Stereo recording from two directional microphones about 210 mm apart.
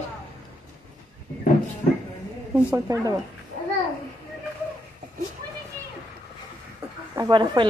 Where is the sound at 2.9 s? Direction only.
15° right (ahead or behind).